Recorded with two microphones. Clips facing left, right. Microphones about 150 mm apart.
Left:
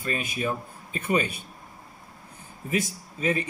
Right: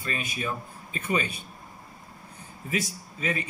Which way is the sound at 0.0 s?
40° left (ahead or behind).